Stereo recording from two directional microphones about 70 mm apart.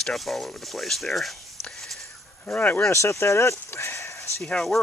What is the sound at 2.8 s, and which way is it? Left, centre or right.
Speech, left.